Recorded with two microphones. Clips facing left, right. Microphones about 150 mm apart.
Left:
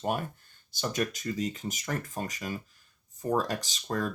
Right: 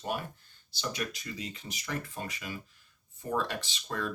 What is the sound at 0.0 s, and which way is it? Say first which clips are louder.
Speech: left 4 dB; 50° left (ahead or behind).